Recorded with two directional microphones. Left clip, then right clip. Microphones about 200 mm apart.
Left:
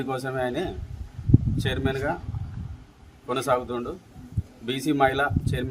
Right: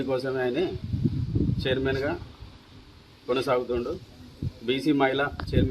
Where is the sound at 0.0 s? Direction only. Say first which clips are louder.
Right 1 dB; 10° left (ahead or behind).